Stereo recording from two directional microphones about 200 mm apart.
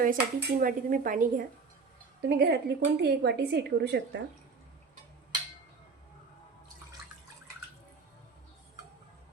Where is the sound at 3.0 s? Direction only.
55° right (ahead or behind).